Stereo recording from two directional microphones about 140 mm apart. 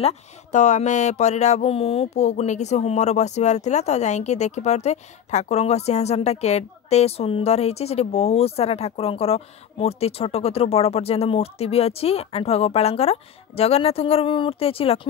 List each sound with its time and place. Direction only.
0.0 s speech: 60° left (ahead or behind); by 15.0 s 40° left (ahead or behind)